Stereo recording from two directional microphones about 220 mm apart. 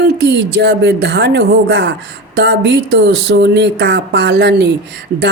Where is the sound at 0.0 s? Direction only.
50° right (ahead or behind).